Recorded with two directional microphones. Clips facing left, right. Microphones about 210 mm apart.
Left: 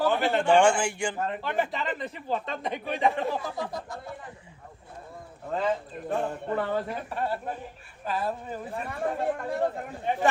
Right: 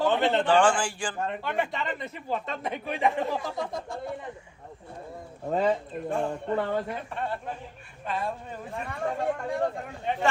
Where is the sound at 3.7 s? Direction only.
25° right (ahead or behind).